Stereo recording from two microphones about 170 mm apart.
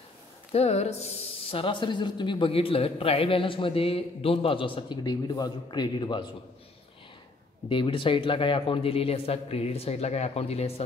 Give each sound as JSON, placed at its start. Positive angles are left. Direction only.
{"t": 0.5, "sound": "speech", "side_deg": 40}
{"t": 7.7, "sound": "speech", "side_deg": 30}